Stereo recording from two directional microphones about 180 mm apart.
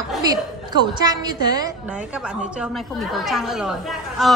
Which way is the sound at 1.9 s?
5° right (ahead or behind).